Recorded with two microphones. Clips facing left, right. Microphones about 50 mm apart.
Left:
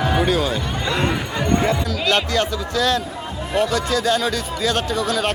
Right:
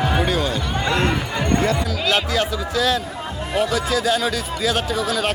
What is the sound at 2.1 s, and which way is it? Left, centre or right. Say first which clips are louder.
Speech: left 1 dB; centre.